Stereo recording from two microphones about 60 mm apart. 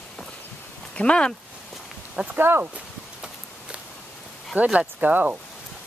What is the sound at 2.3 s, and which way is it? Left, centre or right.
Speech, right.